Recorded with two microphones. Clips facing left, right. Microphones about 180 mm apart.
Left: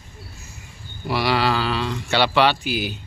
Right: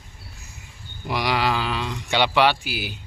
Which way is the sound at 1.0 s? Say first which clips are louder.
Left 2 dB; 15° right (ahead or behind).